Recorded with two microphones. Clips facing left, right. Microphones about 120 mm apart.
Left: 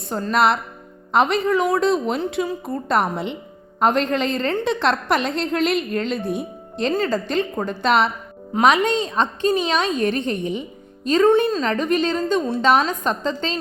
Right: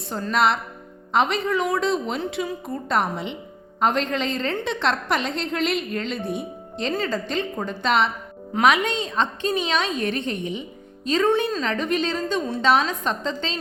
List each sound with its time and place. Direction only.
0.1 s a woman's voice: 45° left (ahead or behind)
8.6 s a woman's voice: 35° left (ahead or behind)